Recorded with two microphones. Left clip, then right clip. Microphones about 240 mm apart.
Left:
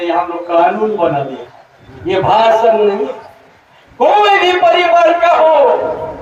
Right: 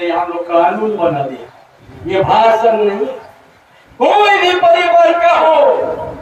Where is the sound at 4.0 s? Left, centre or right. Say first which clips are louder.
Left 1 dB; left.